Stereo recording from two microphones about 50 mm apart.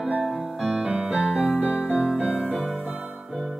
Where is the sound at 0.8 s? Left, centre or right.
Centre.